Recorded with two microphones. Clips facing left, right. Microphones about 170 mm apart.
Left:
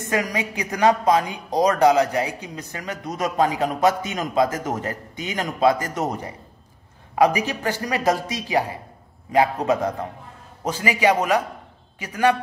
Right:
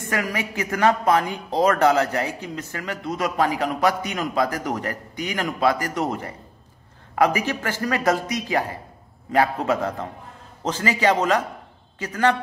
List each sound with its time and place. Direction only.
0.0 s a woman's voice: 20° left (ahead or behind)